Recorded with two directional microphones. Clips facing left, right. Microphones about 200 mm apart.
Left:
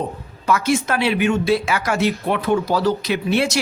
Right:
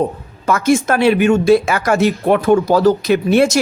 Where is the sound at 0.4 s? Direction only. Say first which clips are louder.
Right 5 dB; 45° right (ahead or behind).